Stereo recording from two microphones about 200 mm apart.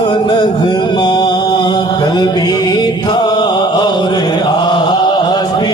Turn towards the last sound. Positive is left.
turn(degrees=20)  # may be behind; listen again after turning